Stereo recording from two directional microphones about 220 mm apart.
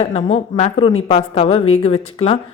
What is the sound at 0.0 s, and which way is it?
Speech, 30° left (ahead or behind).